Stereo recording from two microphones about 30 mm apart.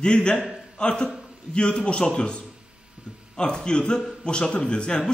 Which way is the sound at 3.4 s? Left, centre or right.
Left.